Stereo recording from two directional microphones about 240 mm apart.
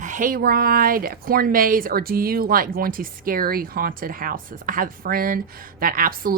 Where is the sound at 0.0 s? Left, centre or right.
Right.